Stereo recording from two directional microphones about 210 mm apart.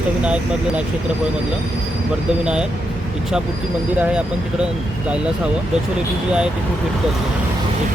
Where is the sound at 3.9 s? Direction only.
5° right (ahead or behind).